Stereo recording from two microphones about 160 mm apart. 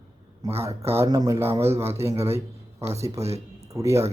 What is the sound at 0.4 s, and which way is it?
A man's voice, 25° right (ahead or behind).